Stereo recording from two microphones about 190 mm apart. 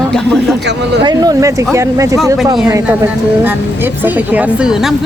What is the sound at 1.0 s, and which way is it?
A woman's voice, 20° right (ahead or behind).